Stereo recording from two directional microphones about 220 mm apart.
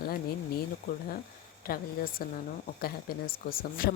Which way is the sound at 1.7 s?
40° left (ahead or behind).